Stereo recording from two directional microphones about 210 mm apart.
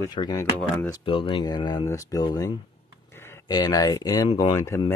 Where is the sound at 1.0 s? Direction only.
25° left (ahead or behind).